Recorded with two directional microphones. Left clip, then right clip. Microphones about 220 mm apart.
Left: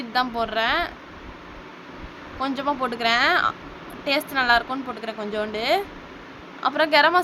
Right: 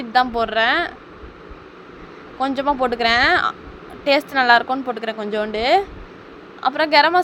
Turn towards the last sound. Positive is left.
turn(degrees=-20)  # may be behind; listen again after turning